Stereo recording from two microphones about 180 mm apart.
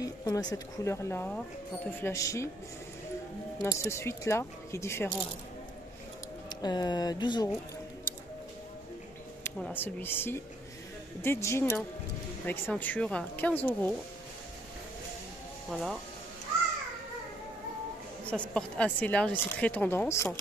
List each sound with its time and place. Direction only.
0.0 s speech: 20° left (ahead or behind)
3.5 s speech: 20° left (ahead or behind)
6.6 s speech: 20° left (ahead or behind)
9.4 s speech: 10° left (ahead or behind)
15.7 s speech: centre (ahead or behind)
18.2 s speech: 5° left (ahead or behind)